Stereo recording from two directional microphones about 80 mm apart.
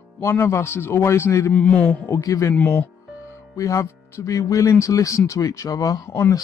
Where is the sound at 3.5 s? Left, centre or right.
Left.